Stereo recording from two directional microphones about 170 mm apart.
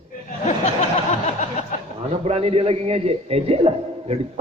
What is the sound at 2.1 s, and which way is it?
A man's voice, 35° right (ahead or behind).